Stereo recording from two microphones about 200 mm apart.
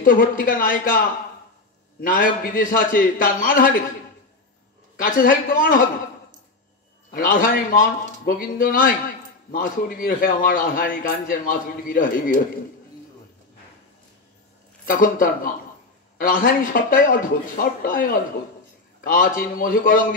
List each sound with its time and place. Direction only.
0.0 s a man's voice: 45° left (ahead or behind)
5.0 s a man's voice: 45° left (ahead or behind)
7.1 s a man's voice: 45° left (ahead or behind)
14.9 s a man's voice: 45° left (ahead or behind)